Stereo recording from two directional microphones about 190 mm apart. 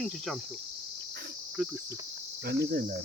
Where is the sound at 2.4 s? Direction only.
60° right (ahead or behind).